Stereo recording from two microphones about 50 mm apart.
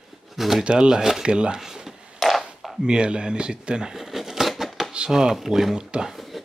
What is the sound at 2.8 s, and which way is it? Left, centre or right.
Speech, centre.